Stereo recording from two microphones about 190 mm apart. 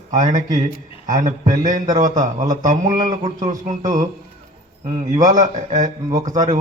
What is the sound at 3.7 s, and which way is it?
Speech, 40° right (ahead or behind).